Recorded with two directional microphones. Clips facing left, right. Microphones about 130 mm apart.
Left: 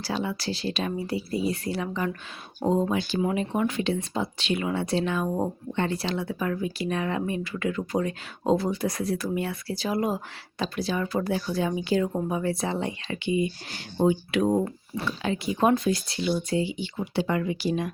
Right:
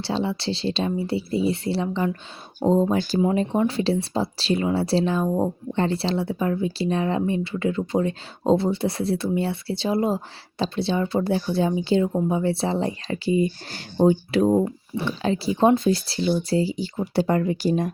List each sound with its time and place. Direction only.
0.0 s speech: 30° right (ahead or behind)
2.6 s speech: 15° right (ahead or behind)
3.2 s speech: 25° right (ahead or behind)